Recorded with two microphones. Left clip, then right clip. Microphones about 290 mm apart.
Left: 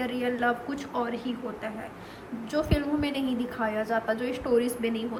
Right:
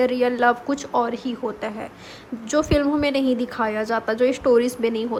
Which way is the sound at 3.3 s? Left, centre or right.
Centre.